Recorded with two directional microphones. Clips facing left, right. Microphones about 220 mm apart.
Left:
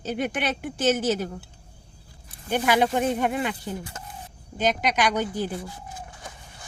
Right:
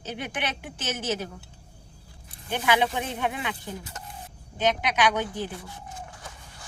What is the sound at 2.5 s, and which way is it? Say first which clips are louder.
A woman's voice: left 3 dB; 45° left (ahead or behind).